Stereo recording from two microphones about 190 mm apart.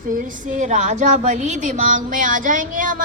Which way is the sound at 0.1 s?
45° right (ahead or behind).